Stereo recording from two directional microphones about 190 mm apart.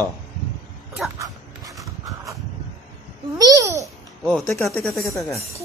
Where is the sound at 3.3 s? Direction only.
20° right (ahead or behind).